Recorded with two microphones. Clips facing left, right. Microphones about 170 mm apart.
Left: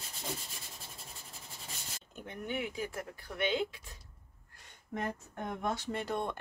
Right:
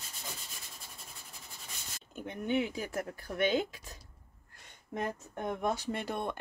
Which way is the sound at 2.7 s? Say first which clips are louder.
Right 2 dB; 40° right (ahead or behind).